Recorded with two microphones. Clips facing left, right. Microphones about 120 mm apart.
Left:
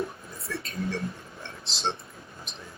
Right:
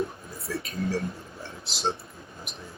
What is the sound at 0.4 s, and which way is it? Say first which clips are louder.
Speech: right 2 dB; 5° right (ahead or behind).